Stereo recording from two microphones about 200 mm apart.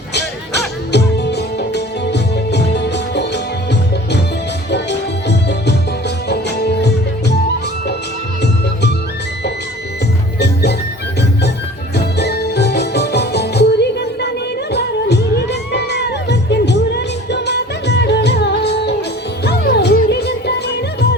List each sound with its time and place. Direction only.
0.1 s music: 55° left (ahead or behind)
4.7 s music: 60° left (ahead or behind)
10.4 s music: 55° left (ahead or behind)
11.9 s music: 55° left (ahead or behind)